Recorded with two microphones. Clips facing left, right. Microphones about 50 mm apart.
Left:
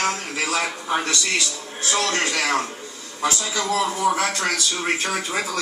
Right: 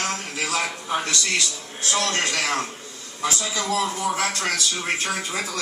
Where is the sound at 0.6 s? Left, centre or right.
Left.